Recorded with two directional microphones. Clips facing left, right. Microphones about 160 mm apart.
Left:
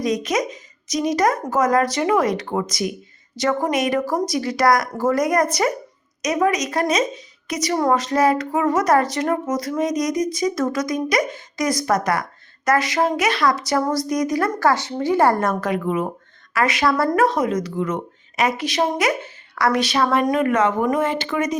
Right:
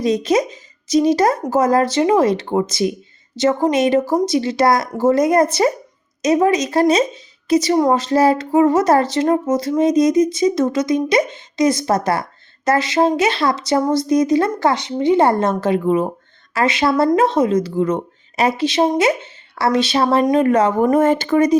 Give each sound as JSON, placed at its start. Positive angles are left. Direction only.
{"t": 0.0, "sound": "speech", "side_deg": -30}